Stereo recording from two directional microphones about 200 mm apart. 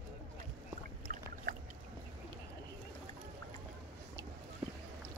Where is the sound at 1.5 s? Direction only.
40° right (ahead or behind).